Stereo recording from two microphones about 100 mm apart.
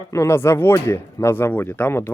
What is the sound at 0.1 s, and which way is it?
Speech, 25° left (ahead or behind).